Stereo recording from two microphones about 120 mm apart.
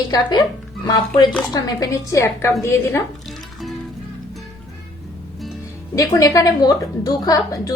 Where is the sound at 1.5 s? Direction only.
30° left (ahead or behind).